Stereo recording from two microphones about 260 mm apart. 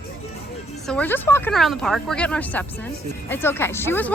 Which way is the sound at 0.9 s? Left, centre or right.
Centre.